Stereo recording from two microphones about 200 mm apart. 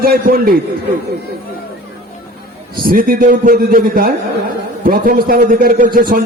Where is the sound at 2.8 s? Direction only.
45° right (ahead or behind).